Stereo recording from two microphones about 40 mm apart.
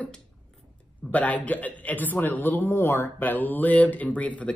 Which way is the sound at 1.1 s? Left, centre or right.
Left.